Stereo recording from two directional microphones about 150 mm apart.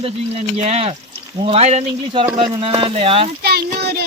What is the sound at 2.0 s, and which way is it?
Speech, 35° right (ahead or behind).